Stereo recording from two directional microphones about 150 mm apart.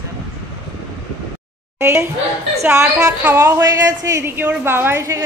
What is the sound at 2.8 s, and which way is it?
Speech, 10° right (ahead or behind).